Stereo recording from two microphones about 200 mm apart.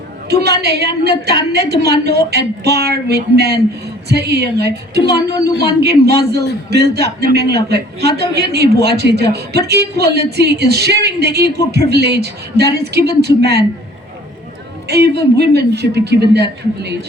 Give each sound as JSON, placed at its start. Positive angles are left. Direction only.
{"t": 0.3, "sound": "a woman's voice", "side_deg": -55}
{"t": 14.8, "sound": "a woman's voice", "side_deg": -55}